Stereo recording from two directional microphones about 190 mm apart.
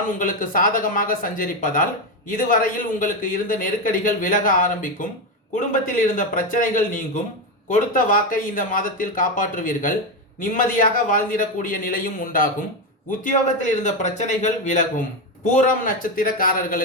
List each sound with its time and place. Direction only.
0.2 s speech: 45° left (ahead or behind)